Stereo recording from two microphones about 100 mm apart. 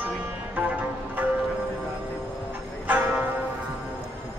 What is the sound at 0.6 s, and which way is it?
Music, 15° right (ahead or behind).